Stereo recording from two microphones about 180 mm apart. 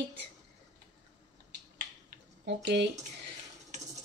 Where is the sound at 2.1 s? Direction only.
70° right (ahead or behind).